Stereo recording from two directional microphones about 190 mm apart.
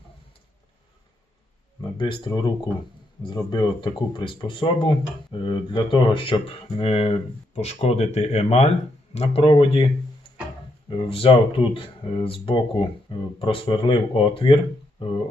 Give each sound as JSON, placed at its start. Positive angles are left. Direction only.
{"t": 2.0, "sound": "speech", "side_deg": 25}
{"t": 10.8, "sound": "speech", "side_deg": 30}